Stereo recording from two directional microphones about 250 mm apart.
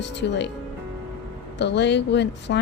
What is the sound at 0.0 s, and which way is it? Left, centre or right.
Speech, left.